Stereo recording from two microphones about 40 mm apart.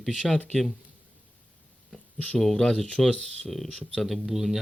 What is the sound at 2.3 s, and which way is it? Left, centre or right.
Speech, centre.